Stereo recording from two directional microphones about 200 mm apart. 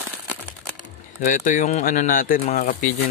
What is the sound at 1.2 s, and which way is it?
Speech, 40° left (ahead or behind).